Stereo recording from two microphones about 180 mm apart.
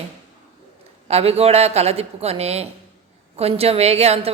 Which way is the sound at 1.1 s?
35° right (ahead or behind).